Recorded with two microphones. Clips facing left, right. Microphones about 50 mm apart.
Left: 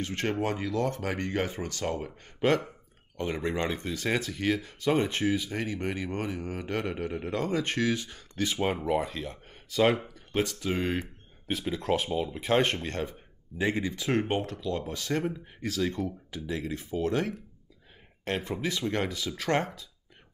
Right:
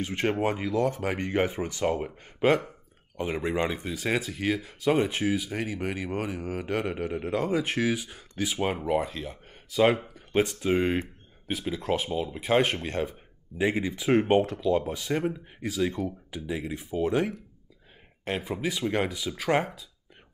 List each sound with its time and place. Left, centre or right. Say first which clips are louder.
0.0 s speech: right 3 dB; centre
10.1 s a sound: right 4 dB; centre
11.0 s speech: right 3 dB; centre